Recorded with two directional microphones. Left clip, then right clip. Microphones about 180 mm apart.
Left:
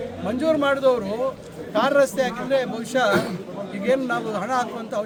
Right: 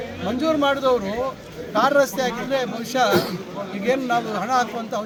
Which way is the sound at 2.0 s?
30° left (ahead or behind).